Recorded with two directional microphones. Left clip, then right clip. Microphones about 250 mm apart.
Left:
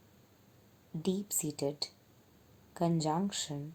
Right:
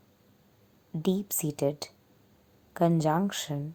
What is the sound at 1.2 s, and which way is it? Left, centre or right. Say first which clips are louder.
A woman's voice: right 6 dB; right.